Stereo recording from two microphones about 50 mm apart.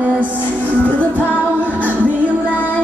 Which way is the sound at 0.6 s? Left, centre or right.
Left.